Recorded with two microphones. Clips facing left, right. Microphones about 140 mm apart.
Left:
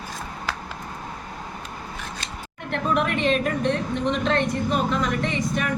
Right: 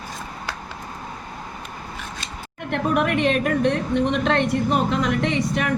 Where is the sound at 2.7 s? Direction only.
55° right (ahead or behind).